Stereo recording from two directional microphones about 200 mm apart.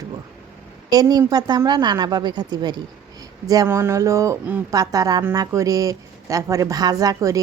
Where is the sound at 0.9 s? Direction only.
20° right (ahead or behind).